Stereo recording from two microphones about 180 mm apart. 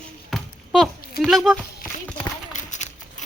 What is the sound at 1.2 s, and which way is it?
Speech, centre (ahead or behind).